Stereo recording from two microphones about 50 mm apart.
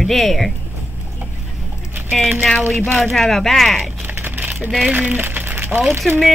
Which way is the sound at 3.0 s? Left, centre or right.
Centre.